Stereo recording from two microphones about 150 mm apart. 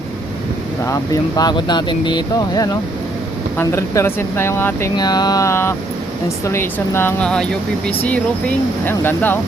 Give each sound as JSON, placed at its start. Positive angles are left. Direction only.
{"t": 0.9, "sound": "speech", "side_deg": 25}
{"t": 3.6, "sound": "speech", "side_deg": 20}
{"t": 4.9, "sound": "speech", "side_deg": 25}